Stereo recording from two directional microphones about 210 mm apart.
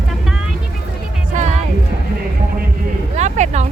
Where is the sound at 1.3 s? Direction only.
35° right (ahead or behind).